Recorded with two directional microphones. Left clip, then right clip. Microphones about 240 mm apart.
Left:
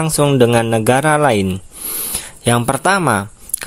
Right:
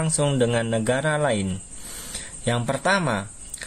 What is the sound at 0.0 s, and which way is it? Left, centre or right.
Speech, left.